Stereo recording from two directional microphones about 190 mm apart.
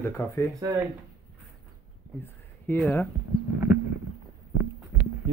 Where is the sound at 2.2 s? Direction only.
10° left (ahead or behind).